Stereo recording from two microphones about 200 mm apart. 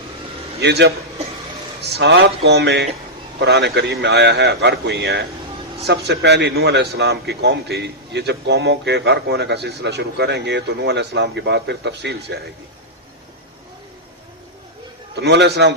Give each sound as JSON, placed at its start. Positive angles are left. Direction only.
{"t": 0.6, "sound": "a man's voice", "side_deg": -55}
{"t": 15.1, "sound": "a man's voice", "side_deg": -55}